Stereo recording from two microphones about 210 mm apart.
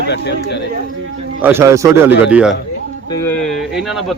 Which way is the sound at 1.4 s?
10° right (ahead or behind).